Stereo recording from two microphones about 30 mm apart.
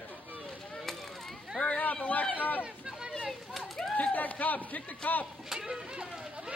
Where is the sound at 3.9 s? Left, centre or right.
Left.